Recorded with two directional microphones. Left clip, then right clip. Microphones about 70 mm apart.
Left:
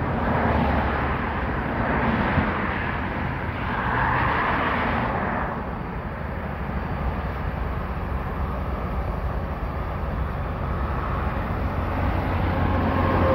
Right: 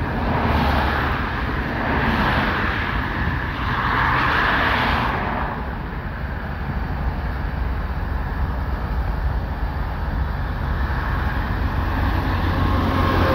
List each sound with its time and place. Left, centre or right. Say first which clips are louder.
0.2 s vehicle: right 1 dB; right
0.5 s vehicle: right 3 dB; right
0.9 s vehicle: right 3 dB; right
1.5 s vehicle: right 2 dB; centre
2.0 s vehicle: right 4 dB; right
2.4 s vehicle: right 4 dB; right
12.0 s vehicle: right 2 dB; centre; by 13.3 s right